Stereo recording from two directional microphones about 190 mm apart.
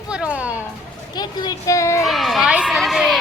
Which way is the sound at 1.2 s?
20° left (ahead or behind).